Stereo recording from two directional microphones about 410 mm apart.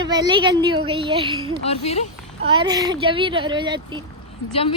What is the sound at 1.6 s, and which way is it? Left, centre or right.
Speech, centre.